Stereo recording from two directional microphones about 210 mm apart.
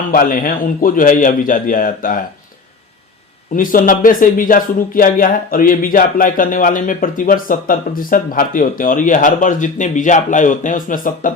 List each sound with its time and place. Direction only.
0.1 s speech: 40° left (ahead or behind)
3.5 s speech: 40° left (ahead or behind)